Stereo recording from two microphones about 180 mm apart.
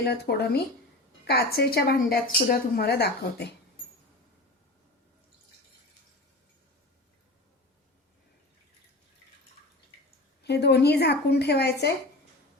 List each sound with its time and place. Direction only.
0.0 s a woman's voice: 65° left (ahead or behind)
10.4 s a woman's voice: 65° left (ahead or behind)